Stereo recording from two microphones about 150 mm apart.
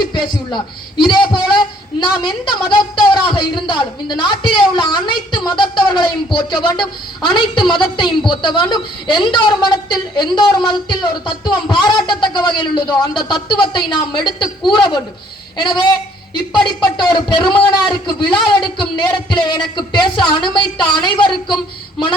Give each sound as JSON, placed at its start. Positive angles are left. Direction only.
{"t": 0.0, "sound": "a man's voice", "side_deg": 30}
{"t": 16.8, "sound": "a man's voice", "side_deg": 30}